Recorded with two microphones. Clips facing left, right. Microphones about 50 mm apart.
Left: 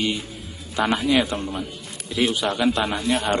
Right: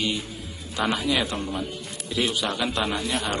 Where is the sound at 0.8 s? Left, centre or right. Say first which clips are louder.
Left 4 dB; centre.